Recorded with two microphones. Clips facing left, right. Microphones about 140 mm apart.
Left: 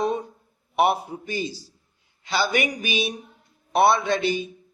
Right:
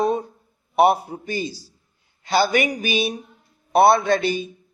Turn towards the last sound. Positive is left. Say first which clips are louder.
# right 3 dB
turn(degrees=-45)  # may be behind; listen again after turning